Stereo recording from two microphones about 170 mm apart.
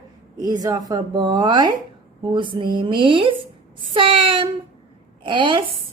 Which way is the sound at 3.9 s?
30° right (ahead or behind).